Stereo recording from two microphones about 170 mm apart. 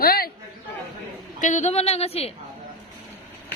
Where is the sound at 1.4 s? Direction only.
45° left (ahead or behind).